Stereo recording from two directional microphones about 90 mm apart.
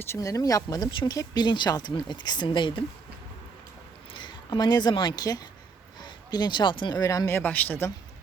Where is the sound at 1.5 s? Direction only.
60° left (ahead or behind).